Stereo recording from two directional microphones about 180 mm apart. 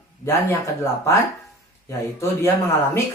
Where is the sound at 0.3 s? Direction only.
15° left (ahead or behind).